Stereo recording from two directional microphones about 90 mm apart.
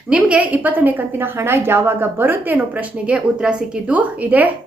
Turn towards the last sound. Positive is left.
turn(degrees=-15)  # may be behind; listen again after turning